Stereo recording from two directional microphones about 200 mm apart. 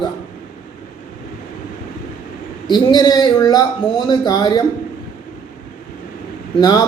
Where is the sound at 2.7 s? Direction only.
20° left (ahead or behind).